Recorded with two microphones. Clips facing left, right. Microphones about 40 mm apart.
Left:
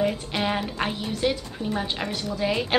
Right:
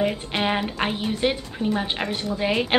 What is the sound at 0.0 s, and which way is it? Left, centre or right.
A woman's voice, right.